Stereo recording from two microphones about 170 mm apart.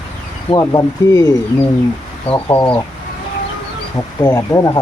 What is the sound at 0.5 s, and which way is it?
Speech, 20° left (ahead or behind).